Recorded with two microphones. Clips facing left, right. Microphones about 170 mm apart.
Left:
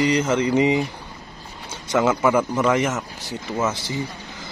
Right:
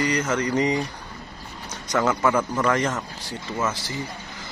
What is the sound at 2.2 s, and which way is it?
A man's voice, 10° left (ahead or behind).